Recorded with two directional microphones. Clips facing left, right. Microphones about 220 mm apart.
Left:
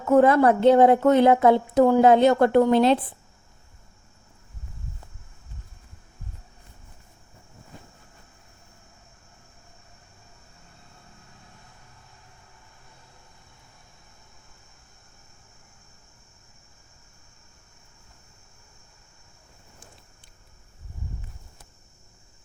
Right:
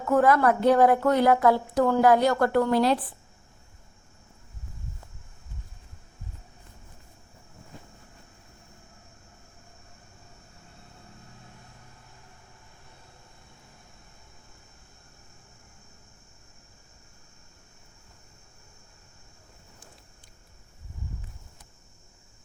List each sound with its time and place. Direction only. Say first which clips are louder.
0.1 s a woman's voice: left 4 dB; 25° left (ahead or behind)